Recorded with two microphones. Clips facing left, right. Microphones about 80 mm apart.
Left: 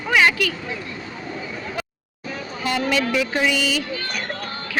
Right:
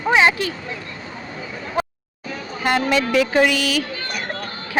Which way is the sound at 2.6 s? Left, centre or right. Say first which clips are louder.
Right 3 dB; right.